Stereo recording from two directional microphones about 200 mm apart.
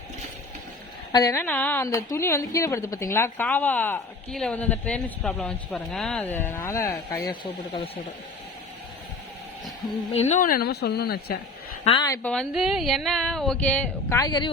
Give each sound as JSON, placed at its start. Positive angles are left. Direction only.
{"t": 1.1, "sound": "a woman's voice", "side_deg": 15}
{"t": 10.2, "sound": "speech", "side_deg": 35}
{"t": 11.9, "sound": "a woman's voice", "side_deg": 20}
{"t": 12.3, "sound": "a woman's voice", "side_deg": 0}